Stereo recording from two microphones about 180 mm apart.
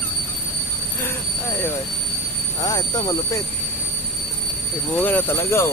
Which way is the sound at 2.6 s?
20° left (ahead or behind).